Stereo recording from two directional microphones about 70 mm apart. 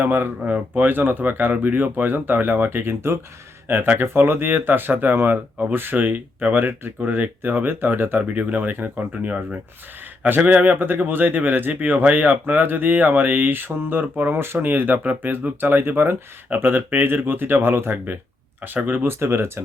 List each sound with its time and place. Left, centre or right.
0.0 s speech: right